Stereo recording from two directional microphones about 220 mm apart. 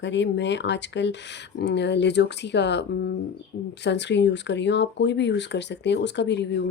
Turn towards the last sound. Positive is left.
turn(degrees=50)  # may be behind; listen again after turning